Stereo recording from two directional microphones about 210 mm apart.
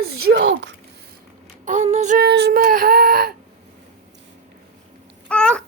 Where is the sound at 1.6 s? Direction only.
35° right (ahead or behind).